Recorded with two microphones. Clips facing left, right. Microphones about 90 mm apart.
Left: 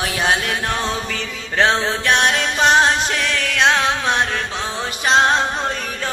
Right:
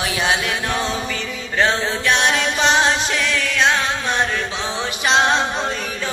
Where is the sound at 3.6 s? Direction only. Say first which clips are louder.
Left 3 dB; 70° left (ahead or behind).